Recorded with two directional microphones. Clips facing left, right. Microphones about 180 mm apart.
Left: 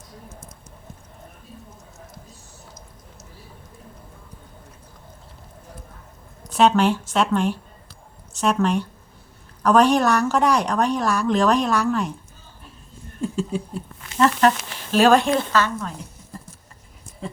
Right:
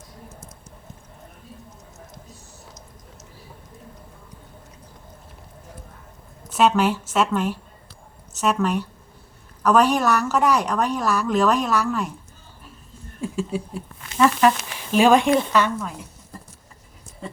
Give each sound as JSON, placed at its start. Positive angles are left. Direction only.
{"t": 6.5, "sound": "speech", "side_deg": -5}
{"t": 13.2, "sound": "speech", "side_deg": -5}